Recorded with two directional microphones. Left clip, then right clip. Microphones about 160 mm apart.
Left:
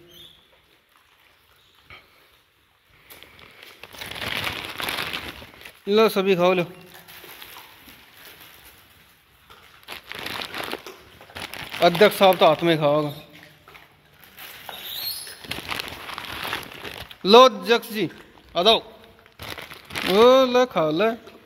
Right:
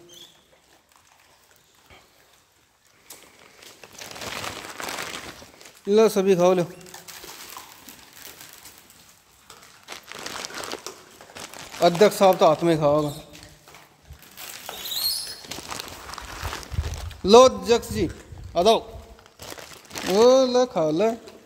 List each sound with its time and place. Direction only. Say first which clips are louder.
3.8 s a sound: left 5 dB; 30° left (ahead or behind)
5.9 s speech: even; 20° right (ahead or behind)
9.8 s crumpling: left 3 dB; 25° left (ahead or behind)
12.2 s a man's voice: left 1 dB; 15° right (ahead or behind)
15.4 s crumpling: left 5 dB; 30° left (ahead or behind)
17.1 s a man's voice: left 1 dB; 15° right (ahead or behind)
18.5 s a man's voice: left 1 dB; 25° right (ahead or behind)
19.3 s crumpling: left 4 dB; 30° left (ahead or behind)
20.7 s a man's voice: left 1 dB; 10° right (ahead or behind)